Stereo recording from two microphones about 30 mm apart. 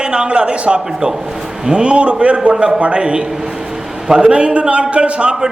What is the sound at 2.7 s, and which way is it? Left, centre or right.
A man's voice, right.